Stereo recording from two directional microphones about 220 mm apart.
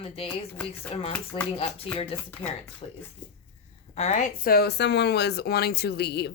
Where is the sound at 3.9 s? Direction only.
30° left (ahead or behind).